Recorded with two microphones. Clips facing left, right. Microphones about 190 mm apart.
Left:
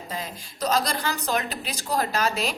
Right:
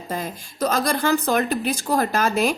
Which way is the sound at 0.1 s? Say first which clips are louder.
Right 7 dB; 50° right (ahead or behind).